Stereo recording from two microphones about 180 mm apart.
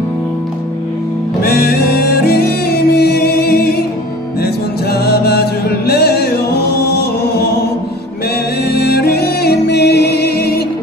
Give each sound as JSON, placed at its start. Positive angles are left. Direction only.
{"t": 1.4, "sound": "music", "side_deg": 60}
{"t": 4.9, "sound": "music", "side_deg": 60}
{"t": 8.6, "sound": "music", "side_deg": 60}